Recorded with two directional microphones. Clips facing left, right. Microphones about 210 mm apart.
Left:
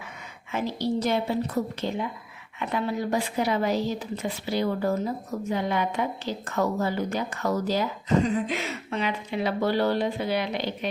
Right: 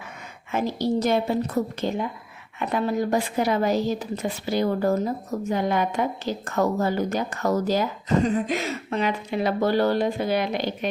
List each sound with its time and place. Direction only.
0.5 s a woman's voice: 45° right (ahead or behind)